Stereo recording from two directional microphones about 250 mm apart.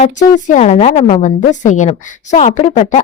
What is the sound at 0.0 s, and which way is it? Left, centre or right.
Speech, left.